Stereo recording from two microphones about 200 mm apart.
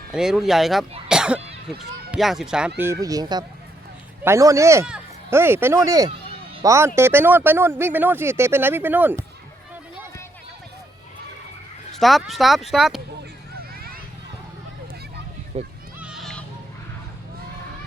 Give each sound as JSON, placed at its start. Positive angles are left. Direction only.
{"t": 0.1, "sound": "speech", "side_deg": 0}
{"t": 1.0, "sound": "cough", "side_deg": -5}
{"t": 1.8, "sound": "speech", "side_deg": 0}
{"t": 11.9, "sound": "speech", "side_deg": 0}
{"t": 15.5, "sound": "a child's voice", "side_deg": -30}
{"t": 16.0, "sound": "a sound", "side_deg": -5}